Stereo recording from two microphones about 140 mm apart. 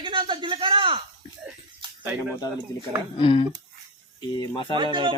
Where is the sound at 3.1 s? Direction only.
40° left (ahead or behind).